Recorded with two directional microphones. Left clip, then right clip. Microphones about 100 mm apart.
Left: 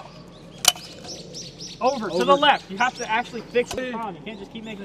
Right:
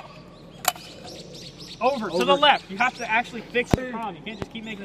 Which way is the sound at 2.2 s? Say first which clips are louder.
Left 1 dB; 5° right (ahead or behind).